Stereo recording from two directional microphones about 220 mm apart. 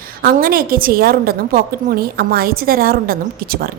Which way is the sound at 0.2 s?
40° right (ahead or behind).